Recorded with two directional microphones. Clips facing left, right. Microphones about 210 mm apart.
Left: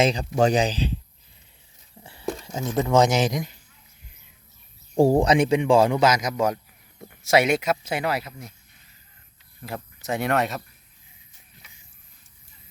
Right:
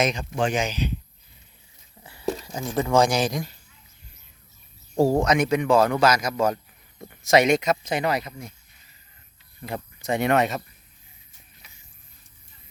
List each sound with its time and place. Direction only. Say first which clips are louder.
0.0 s speech: left 4 dB; 35° left (ahead or behind)
2.0 s a sound: right 2 dB; 25° left (ahead or behind)
2.9 s a man's voice: left 1 dB; 20° left (ahead or behind)
5.2 s a man's voice: left 2 dB; 30° left (ahead or behind); by 8.5 s centre (ahead or behind)
9.6 s speech: right 2 dB; centre (ahead or behind)